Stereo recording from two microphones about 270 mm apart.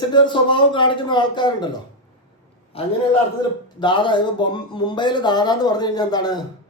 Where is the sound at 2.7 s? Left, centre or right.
Left.